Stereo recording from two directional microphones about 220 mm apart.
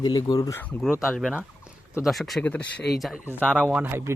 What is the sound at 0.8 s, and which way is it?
Speech, centre (ahead or behind).